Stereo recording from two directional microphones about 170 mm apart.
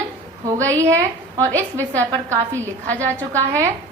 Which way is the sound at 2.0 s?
15° right (ahead or behind).